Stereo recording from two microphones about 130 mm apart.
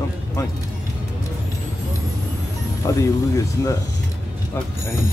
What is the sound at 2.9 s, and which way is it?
Speech, 25° left (ahead or behind).